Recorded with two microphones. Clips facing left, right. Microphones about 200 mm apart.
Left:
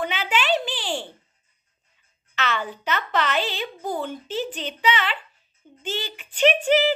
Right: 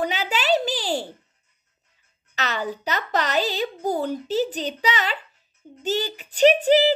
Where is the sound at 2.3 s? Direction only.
40° right (ahead or behind).